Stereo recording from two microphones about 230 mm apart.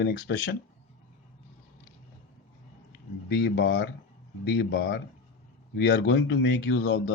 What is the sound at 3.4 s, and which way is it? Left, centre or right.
Speech, left.